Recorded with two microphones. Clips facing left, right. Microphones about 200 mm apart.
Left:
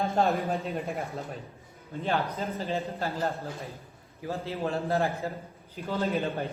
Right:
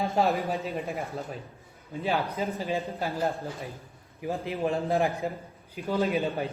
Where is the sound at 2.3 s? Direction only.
10° right (ahead or behind).